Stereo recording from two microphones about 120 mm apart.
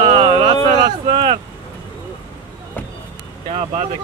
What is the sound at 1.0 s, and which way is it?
Vehicle, 55° right (ahead or behind).